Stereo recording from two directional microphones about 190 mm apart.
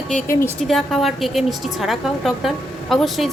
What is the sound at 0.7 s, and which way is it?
A woman's voice, centre (ahead or behind).